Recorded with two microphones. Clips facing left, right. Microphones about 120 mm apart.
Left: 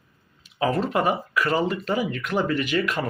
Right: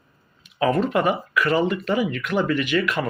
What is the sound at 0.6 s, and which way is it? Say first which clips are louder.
Speech: right 3 dB; 35° left (ahead or behind).